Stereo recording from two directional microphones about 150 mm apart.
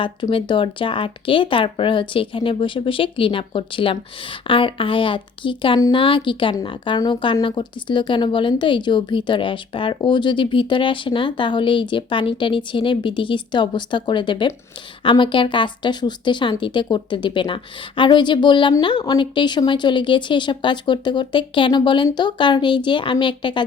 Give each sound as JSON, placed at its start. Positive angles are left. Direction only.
{"t": 0.0, "sound": "speech", "side_deg": 35}